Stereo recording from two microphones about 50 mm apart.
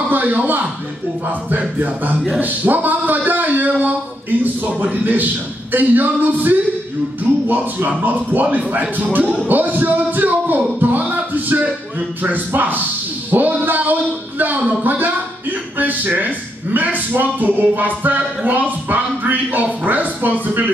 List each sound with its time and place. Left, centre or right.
0.1 s speech: right
5.0 s speech: right
9.2 s speech: centre
9.5 s a man's voice: right
13.3 s a sound: right
14.8 s speech: right